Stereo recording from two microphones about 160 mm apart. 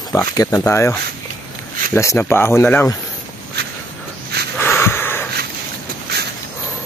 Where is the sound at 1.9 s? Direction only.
15° left (ahead or behind).